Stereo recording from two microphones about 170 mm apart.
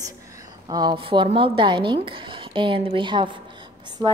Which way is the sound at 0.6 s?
25° right (ahead or behind).